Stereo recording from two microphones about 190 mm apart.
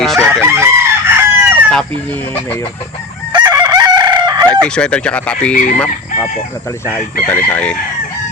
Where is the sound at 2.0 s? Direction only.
10° left (ahead or behind).